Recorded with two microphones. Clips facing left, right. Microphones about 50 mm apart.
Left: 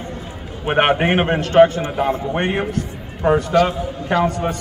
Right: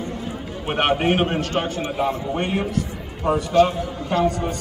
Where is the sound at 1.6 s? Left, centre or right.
Left.